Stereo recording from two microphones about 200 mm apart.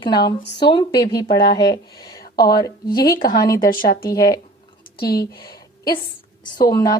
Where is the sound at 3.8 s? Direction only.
50° left (ahead or behind).